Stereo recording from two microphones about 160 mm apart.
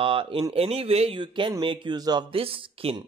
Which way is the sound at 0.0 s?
35° right (ahead or behind).